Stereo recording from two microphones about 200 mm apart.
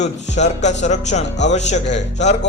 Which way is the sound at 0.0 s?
35° left (ahead or behind).